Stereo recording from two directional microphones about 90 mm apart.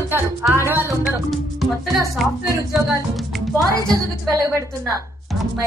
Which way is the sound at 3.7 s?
45° right (ahead or behind).